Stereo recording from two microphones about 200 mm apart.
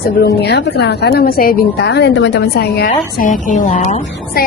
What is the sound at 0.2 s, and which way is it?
A woman's voice, 55° left (ahead or behind).